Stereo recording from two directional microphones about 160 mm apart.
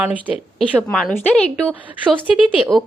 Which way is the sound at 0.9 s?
5° left (ahead or behind).